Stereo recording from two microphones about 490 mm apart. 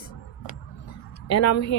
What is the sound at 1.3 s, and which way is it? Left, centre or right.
Speech, left.